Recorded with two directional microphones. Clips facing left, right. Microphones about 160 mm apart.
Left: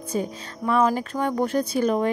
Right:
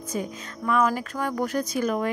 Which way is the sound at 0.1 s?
30° left (ahead or behind).